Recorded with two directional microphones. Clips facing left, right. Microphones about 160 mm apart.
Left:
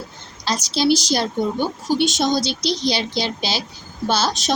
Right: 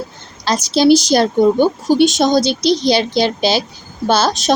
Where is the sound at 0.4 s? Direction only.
55° right (ahead or behind).